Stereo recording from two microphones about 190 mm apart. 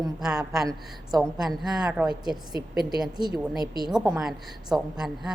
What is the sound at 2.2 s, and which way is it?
A woman's voice, 20° right (ahead or behind).